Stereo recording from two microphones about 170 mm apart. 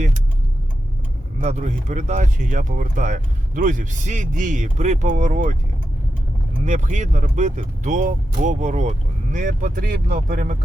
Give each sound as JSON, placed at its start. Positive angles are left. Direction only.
{"t": 1.4, "sound": "speech", "side_deg": -40}
{"t": 6.7, "sound": "speech", "side_deg": -45}